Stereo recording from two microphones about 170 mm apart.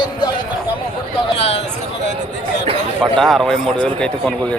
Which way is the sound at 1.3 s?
40° left (ahead or behind).